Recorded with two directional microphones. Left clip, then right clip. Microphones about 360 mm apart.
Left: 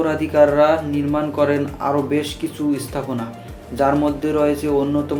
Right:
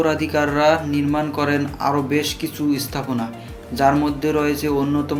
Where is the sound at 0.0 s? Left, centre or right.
Right.